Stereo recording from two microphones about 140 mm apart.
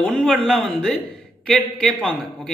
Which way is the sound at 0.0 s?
Centre (ahead or behind).